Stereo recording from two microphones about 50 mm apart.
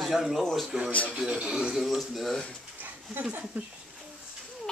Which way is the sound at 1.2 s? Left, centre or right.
Centre.